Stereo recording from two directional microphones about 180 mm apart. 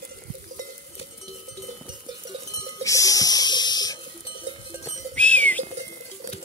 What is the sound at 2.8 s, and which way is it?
Music, 20° left (ahead or behind).